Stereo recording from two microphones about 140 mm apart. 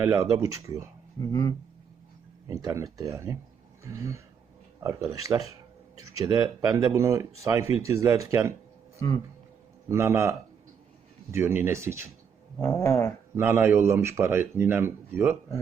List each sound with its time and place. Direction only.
0.0 s speech: 25° right (ahead or behind)
1.2 s speech: 20° left (ahead or behind)
2.5 s speech: 25° right (ahead or behind)
9.0 s speech: 25° left (ahead or behind)
9.9 s a man's voice: 20° right (ahead or behind)
12.5 s cat: 15° left (ahead or behind)
13.3 s a man's voice: 15° right (ahead or behind)